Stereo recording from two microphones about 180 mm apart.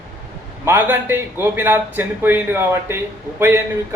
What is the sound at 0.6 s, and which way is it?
A man's voice, 10° right (ahead or behind).